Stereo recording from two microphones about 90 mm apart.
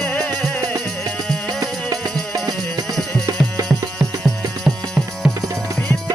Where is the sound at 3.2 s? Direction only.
45° right (ahead or behind).